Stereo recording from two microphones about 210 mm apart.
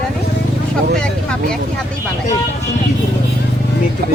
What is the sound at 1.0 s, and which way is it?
Speech, 5° left (ahead or behind).